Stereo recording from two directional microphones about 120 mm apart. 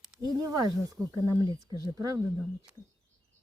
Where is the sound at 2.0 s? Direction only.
30° right (ahead or behind).